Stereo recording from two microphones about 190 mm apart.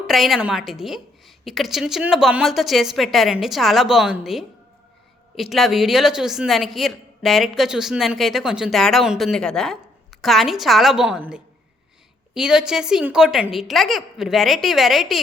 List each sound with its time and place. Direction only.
0.1 s a woman's voice: centre (ahead or behind)